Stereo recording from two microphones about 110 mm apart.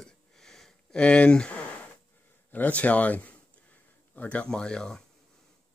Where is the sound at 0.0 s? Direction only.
5° left (ahead or behind).